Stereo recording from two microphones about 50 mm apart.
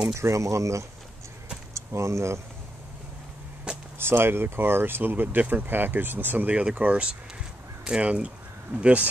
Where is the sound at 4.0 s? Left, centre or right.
Right.